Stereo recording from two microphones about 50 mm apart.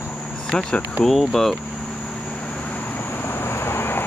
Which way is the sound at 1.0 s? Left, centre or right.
Centre.